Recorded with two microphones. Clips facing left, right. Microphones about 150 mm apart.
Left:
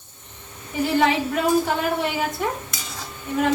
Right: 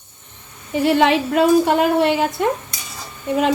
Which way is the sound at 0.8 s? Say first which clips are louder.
Right 5 dB; 85° right.